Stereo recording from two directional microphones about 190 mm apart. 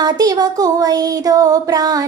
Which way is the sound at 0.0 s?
20° right (ahead or behind).